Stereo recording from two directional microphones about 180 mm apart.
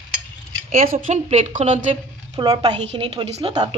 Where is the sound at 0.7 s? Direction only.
50° right (ahead or behind).